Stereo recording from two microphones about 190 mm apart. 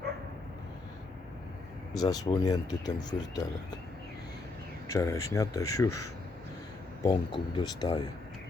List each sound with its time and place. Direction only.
1.9 s speech: 20° left (ahead or behind)
4.9 s speech: 15° left (ahead or behind)